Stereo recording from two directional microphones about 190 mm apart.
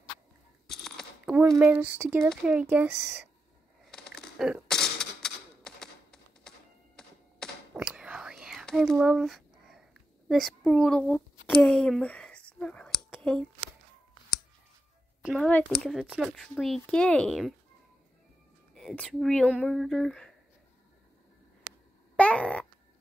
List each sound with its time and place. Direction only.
0.7 s a sound: centre (ahead or behind)
2.2 s speech: 5° right (ahead or behind)
3.8 s typewriter: centre (ahead or behind)
7.4 s thunk: 5° left (ahead or behind)
7.7 s whispering: 5° right (ahead or behind)
15.2 s speech: 5° left (ahead or behind)
18.8 s speech: centre (ahead or behind)
22.1 s a sound: 5° left (ahead or behind)